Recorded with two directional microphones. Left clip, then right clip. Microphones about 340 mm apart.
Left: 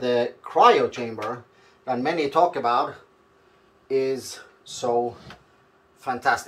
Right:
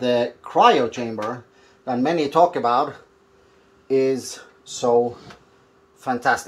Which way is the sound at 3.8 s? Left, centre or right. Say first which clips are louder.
Right 4 dB; right.